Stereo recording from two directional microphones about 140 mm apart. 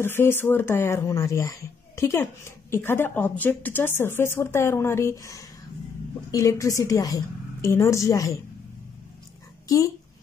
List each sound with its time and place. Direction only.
0.0 s a woman's voice: 15° left (ahead or behind)